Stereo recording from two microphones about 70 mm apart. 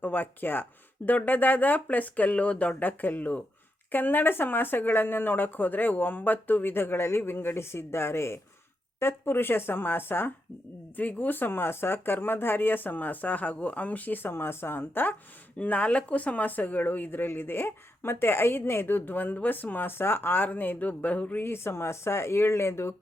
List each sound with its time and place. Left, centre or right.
0.0 s speech: left
15.5 s speech: left
21.4 s speech: left